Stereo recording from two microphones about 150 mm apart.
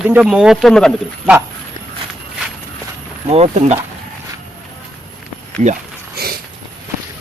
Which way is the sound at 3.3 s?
45° right (ahead or behind).